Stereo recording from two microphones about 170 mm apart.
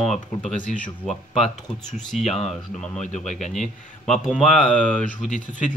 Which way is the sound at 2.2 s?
40° left (ahead or behind).